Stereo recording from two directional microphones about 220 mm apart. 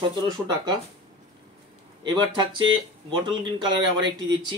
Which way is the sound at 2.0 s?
20° right (ahead or behind).